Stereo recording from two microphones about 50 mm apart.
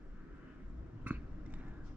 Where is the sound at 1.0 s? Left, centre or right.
Right.